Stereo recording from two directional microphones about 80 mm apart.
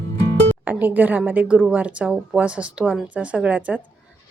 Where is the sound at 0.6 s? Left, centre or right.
Right.